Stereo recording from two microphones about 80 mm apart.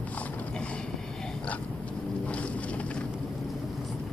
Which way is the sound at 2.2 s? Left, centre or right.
Centre.